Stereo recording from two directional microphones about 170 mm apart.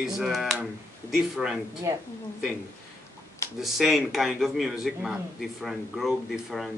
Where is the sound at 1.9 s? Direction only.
20° right (ahead or behind).